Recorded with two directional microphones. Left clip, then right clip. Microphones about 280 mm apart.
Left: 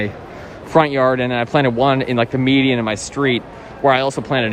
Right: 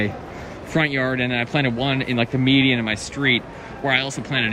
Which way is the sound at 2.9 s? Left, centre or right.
Centre.